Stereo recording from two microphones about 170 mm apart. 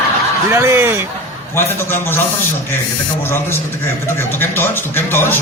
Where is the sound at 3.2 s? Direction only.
15° left (ahead or behind).